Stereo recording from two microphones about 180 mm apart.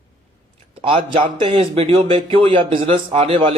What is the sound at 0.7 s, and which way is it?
A man's voice, 30° right (ahead or behind).